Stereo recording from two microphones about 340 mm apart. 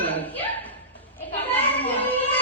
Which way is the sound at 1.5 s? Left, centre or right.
Centre.